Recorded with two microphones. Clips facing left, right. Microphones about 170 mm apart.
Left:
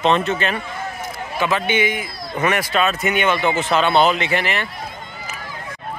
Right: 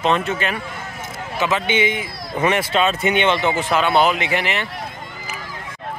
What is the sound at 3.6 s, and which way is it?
Speech, 10° right (ahead or behind).